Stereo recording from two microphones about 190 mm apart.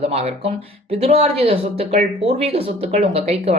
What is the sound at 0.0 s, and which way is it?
Speech, 35° right (ahead or behind).